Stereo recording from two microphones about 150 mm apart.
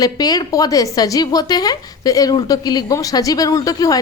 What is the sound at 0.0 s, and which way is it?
A woman's voice, 25° left (ahead or behind).